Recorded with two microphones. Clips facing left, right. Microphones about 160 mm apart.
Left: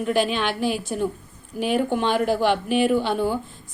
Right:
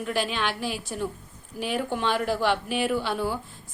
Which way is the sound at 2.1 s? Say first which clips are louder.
Left 6 dB; 50° left (ahead or behind).